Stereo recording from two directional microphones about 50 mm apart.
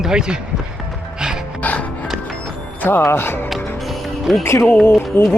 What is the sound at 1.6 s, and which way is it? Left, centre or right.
Music, left.